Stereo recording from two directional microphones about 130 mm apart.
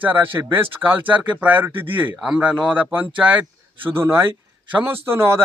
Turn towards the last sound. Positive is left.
turn(degrees=-20)  # may be behind; listen again after turning